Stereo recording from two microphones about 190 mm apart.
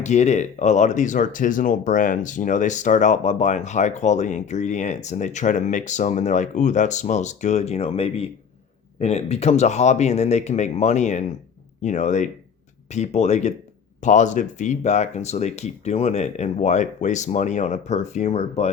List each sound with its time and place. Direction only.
0.0 s speech: 35° left (ahead or behind)